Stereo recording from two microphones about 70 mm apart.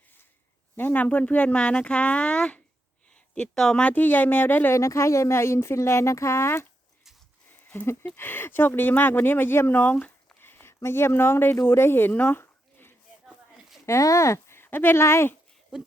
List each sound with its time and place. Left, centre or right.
0.8 s speech: left; by 3.8 s centre
3.8 s speech: left
4.7 s speech: left
8.1 s speech: left
9.8 s speech: left
10.4 s a sound: left
10.8 s speech: left
13.2 s a sound: centre
13.8 s speech: left